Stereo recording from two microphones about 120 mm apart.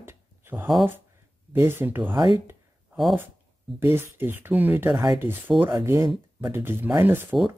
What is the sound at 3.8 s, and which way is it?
Speech, 20° right (ahead or behind).